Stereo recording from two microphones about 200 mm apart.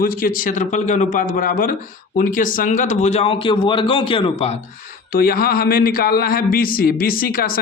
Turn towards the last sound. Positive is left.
turn(degrees=45)  # may be behind; listen again after turning